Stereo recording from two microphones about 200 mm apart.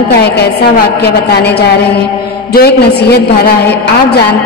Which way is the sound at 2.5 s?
55° left (ahead or behind).